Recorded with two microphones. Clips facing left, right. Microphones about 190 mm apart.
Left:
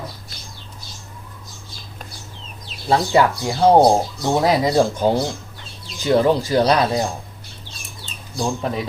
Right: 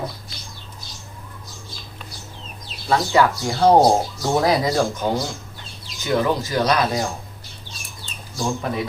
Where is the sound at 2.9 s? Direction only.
20° left (ahead or behind).